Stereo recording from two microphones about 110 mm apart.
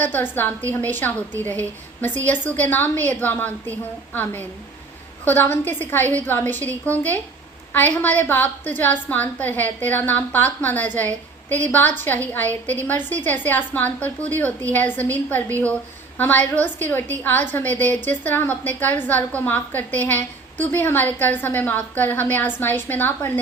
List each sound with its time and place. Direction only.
0.0 s a woman's voice: 20° left (ahead or behind)